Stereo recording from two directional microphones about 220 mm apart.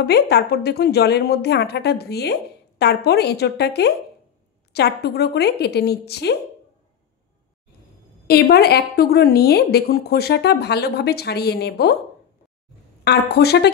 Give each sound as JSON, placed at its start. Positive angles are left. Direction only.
{"t": 0.0, "sound": "a woman's voice", "side_deg": 50}
{"t": 8.3, "sound": "a woman's voice", "side_deg": 45}
{"t": 13.0, "sound": "a woman's voice", "side_deg": 50}